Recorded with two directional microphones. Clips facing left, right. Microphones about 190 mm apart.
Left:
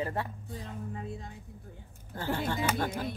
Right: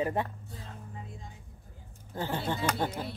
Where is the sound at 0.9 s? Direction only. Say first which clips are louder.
Left 6 dB; 65° left (ahead or behind).